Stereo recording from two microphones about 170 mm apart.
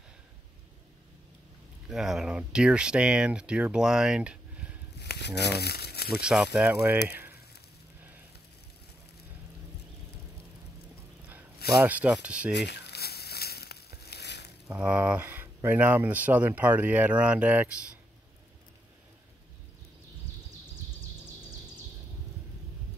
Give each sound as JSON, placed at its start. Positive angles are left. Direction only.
{"t": 1.9, "sound": "speech", "side_deg": 0}
{"t": 4.9, "sound": "crumpling", "side_deg": 80}
{"t": 6.2, "sound": "speech", "side_deg": 0}
{"t": 7.1, "sound": "a sound", "side_deg": -10}
{"t": 11.8, "sound": "speech", "side_deg": -10}
{"t": 12.5, "sound": "crumpling", "side_deg": 85}
{"t": 14.7, "sound": "speech", "side_deg": -5}